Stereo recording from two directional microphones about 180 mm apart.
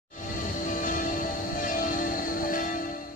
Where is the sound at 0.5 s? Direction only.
45° left (ahead or behind).